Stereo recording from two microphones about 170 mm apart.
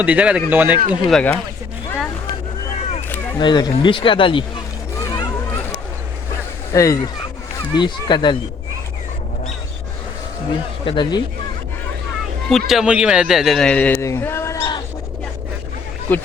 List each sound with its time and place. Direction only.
0.0 s speech: 10° right (ahead or behind)
1.0 s speech: 5° left (ahead or behind)
3.3 s speech: 25° left (ahead or behind)
6.7 s speech: 20° left (ahead or behind)
10.8 s speech: 30° left (ahead or behind)
12.5 s speech: centre (ahead or behind); by 14.8 s 20° left (ahead or behind)
16.1 s speech: 10° left (ahead or behind)